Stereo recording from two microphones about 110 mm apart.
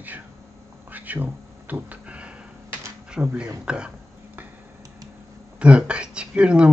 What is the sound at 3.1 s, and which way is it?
Speech, 10° right (ahead or behind).